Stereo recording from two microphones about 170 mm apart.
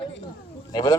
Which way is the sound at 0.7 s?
25° left (ahead or behind).